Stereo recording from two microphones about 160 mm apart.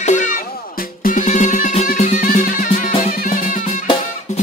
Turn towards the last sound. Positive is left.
turn(degrees=55)  # may be behind; listen again after turning